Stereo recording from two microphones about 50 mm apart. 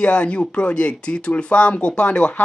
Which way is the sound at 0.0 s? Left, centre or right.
Left.